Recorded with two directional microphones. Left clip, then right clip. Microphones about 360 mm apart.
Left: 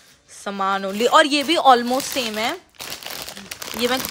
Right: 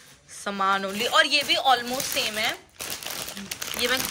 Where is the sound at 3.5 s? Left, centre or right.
Left.